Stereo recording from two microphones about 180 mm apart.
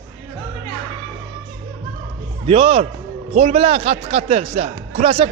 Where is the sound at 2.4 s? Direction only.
30° right (ahead or behind).